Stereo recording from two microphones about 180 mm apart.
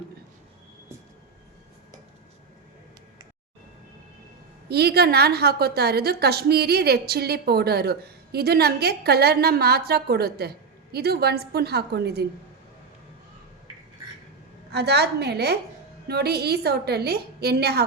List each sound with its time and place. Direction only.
4.7 s a woman's voice: 60° right (ahead or behind)
14.7 s a woman's voice: 65° right (ahead or behind)